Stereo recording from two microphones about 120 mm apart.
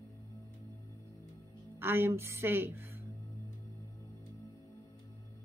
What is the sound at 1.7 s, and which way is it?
Speech, 20° right (ahead or behind).